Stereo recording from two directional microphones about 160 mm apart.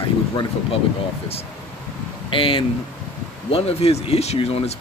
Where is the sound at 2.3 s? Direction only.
35° left (ahead or behind).